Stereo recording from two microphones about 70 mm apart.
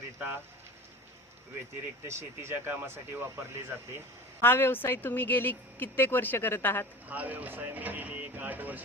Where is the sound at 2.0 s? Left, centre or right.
Right.